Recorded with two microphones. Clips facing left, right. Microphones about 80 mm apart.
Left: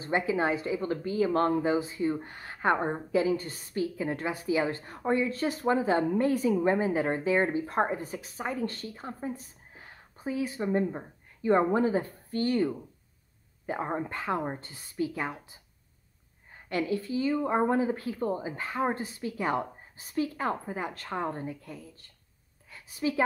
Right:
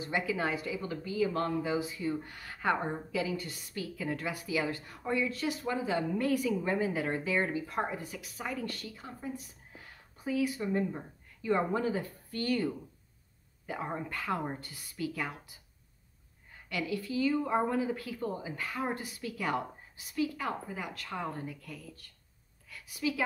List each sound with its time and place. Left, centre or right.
0.0 s a woman's voice: left